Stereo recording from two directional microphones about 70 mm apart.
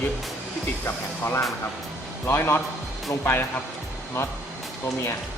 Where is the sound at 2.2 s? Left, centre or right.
Left.